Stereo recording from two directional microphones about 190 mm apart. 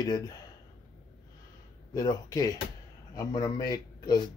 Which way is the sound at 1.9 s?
20° left (ahead or behind).